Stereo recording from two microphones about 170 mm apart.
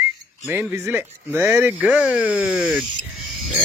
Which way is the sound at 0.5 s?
10° right (ahead or behind).